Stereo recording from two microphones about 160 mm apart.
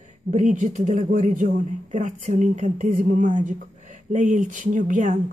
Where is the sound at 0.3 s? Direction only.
50° right (ahead or behind).